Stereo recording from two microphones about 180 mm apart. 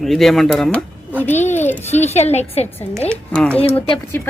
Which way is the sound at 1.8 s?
40° left (ahead or behind).